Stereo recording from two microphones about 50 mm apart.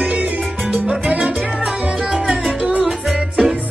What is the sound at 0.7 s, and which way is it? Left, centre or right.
Salsa music, right.